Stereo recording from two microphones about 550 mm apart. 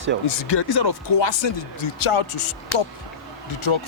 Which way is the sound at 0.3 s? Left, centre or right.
Left.